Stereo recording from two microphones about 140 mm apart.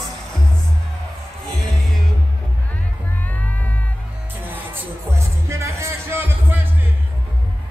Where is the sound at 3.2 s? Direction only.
10° left (ahead or behind).